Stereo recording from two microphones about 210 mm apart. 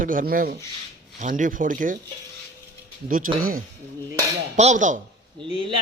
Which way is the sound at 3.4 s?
45° right (ahead or behind).